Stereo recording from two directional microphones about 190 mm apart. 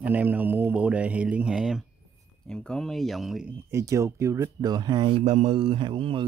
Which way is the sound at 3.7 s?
15° right (ahead or behind).